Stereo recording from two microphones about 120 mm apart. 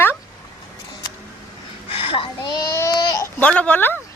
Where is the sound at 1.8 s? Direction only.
50° left (ahead or behind).